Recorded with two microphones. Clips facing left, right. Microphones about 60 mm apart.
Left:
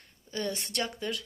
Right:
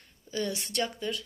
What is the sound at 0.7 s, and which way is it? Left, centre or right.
Speech, left.